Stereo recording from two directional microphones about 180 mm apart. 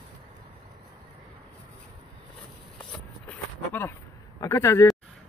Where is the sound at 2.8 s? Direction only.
5° left (ahead or behind).